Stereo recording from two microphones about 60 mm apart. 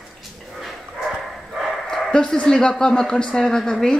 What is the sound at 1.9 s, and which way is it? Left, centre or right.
Speech, centre.